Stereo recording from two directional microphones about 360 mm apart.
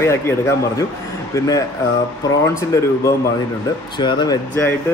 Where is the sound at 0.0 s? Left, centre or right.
Centre.